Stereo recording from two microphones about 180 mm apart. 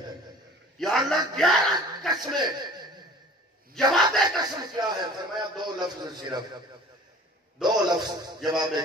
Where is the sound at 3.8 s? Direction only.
Centre (ahead or behind).